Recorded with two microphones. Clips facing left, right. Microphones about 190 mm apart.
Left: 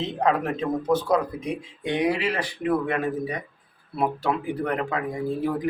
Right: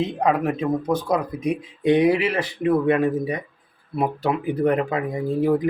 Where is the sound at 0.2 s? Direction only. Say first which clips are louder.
Even; 15° right (ahead or behind).